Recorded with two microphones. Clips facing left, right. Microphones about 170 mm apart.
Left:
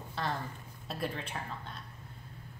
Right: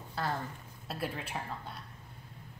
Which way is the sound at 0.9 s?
5° right (ahead or behind).